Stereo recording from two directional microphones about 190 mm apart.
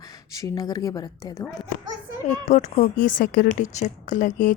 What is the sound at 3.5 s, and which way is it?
Speech, 40° left (ahead or behind).